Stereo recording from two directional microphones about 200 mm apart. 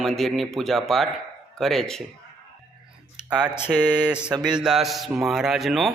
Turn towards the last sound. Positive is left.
turn(degrees=0)  # may be behind; listen again after turning